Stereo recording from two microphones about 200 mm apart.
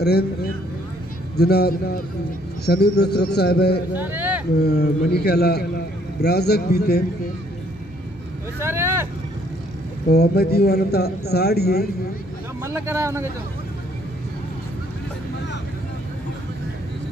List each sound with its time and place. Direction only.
1.3 s a man's voice: 50° left (ahead or behind)
3.9 s speech: 10° right (ahead or behind)
4.6 s a man's voice: 50° left (ahead or behind)
8.5 s vehicle: 10° right (ahead or behind)
10.1 s a man's voice: 55° left (ahead or behind)
12.6 s speech: 15° right (ahead or behind)